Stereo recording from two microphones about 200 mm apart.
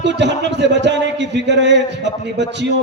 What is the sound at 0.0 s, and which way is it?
A man's voice, 60° right (ahead or behind).